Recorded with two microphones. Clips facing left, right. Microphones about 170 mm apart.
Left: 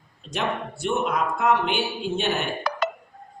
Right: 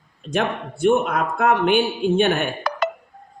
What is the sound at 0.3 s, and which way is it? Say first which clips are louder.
A man's voice: right 4 dB; 55° right (ahead or behind).